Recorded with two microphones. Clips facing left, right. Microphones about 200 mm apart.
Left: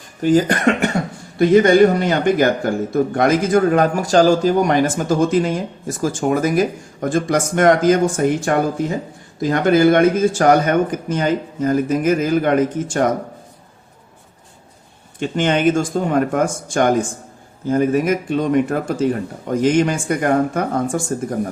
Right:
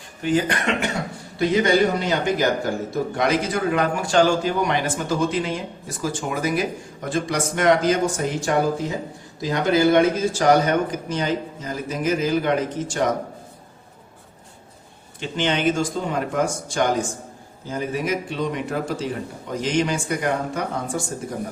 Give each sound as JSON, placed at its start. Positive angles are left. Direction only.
{"t": 0.2, "sound": "a man's voice", "side_deg": 40}
{"t": 15.2, "sound": "a man's voice", "side_deg": 50}